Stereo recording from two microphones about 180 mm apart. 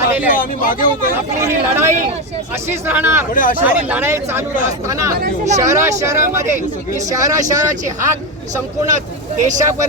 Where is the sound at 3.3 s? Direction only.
50° left (ahead or behind).